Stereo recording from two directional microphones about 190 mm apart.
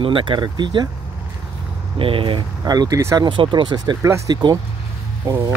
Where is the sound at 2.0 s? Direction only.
30° right (ahead or behind).